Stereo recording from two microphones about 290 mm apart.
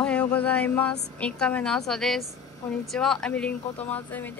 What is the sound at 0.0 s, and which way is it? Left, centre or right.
Speech, centre.